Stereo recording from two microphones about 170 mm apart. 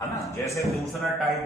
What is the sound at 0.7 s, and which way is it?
Speech, centre (ahead or behind).